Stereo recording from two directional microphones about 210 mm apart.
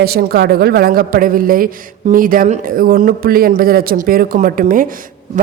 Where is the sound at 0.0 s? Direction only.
45° right (ahead or behind).